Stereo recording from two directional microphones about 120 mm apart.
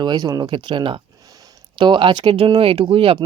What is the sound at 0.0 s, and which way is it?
Speech, 35° right (ahead or behind).